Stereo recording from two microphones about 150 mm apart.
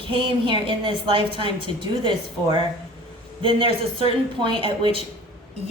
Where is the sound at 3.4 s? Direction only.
35° right (ahead or behind).